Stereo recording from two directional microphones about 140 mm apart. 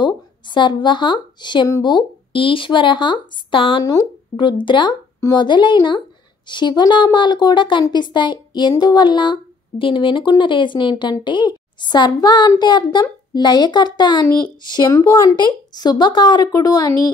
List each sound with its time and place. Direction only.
0.0 s a woman's voice: 35° left (ahead or behind)
3.8 s speech: 25° left (ahead or behind)